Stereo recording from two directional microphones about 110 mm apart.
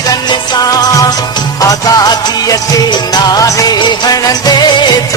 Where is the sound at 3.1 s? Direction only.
35° left (ahead or behind).